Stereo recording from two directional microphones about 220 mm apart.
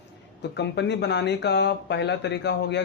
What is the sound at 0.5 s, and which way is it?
Speech, 50° left (ahead or behind).